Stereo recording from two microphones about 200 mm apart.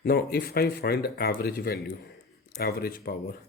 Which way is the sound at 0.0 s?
50° left (ahead or behind).